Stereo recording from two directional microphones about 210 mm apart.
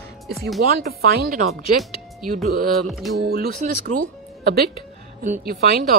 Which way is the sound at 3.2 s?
45° right (ahead or behind).